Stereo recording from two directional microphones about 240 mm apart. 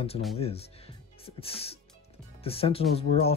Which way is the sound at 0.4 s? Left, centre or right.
Left.